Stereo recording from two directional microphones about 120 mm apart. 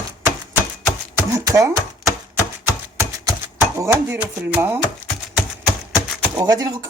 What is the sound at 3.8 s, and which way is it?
Music, 25° right (ahead or behind).